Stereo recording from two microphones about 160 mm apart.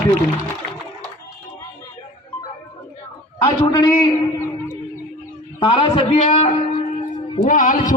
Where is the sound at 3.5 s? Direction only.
30° left (ahead or behind).